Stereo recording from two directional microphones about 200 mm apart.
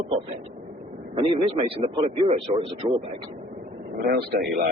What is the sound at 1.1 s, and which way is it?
Speech, 25° right (ahead or behind).